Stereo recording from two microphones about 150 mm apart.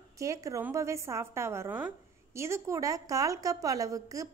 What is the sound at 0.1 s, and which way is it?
A woman's voice, 20° right (ahead or behind).